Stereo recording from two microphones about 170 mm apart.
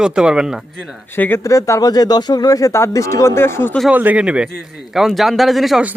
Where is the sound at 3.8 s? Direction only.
10° right (ahead or behind).